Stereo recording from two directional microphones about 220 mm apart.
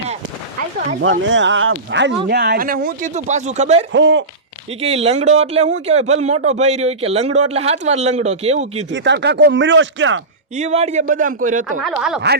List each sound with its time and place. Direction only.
1.2 s speech: 55° right (ahead or behind); by 3.8 s 30° right (ahead or behind)
3.9 s speech: 55° right (ahead or behind)
4.8 s speech: 30° right (ahead or behind)
8.9 s speech: 50° right (ahead or behind)
10.6 s speech: 30° right (ahead or behind)
11.8 s speech: centre (ahead or behind)